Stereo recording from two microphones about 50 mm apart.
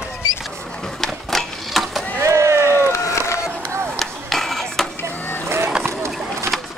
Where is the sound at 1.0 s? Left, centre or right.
Centre.